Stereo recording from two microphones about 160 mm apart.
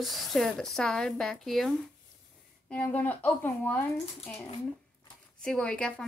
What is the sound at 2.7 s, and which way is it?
Speech, 10° left (ahead or behind).